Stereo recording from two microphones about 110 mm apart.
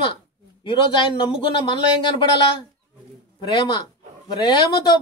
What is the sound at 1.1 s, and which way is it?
Speech, 45° left (ahead or behind).